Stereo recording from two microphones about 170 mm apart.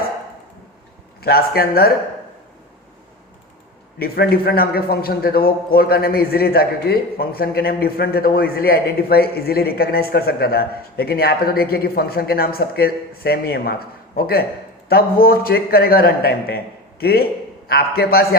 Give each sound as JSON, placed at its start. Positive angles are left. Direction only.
{"t": 1.2, "sound": "a man's voice", "side_deg": 65}
{"t": 3.9, "sound": "a man's voice", "side_deg": 65}